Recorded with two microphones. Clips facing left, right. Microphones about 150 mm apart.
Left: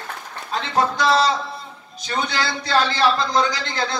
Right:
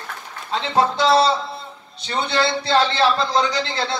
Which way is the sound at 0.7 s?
30° right (ahead or behind).